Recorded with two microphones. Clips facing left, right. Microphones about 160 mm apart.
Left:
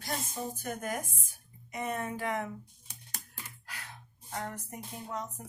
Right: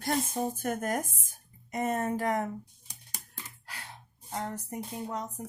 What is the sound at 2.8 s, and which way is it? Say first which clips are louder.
Typing: even; 15° right (ahead or behind).